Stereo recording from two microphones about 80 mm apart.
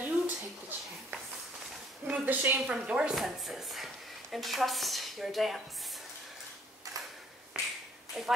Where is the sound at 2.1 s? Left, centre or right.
Right.